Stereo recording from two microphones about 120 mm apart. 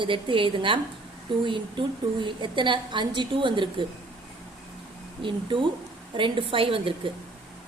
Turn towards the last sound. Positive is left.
turn(degrees=-45)  # may be behind; listen again after turning